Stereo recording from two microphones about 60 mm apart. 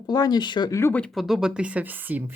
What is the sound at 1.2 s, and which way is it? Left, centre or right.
A woman's voice, centre.